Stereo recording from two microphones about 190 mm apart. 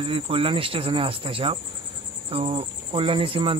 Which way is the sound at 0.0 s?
30° right (ahead or behind).